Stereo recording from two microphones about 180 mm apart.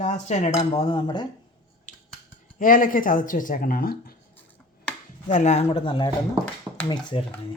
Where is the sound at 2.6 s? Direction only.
50° left (ahead or behind).